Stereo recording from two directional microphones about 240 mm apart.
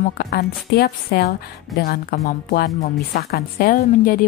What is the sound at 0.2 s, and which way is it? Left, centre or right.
A woman's voice, left.